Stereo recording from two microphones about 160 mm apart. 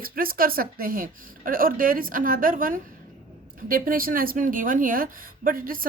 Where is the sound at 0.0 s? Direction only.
65° right (ahead or behind).